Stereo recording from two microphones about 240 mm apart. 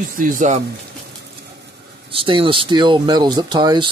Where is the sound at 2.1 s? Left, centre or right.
Right.